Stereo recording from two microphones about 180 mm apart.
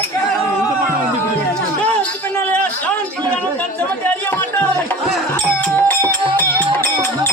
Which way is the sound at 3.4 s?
10° left (ahead or behind).